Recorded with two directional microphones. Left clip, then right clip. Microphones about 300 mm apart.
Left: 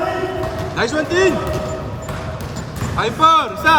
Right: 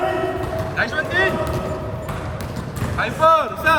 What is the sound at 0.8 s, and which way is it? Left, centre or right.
Speech, centre.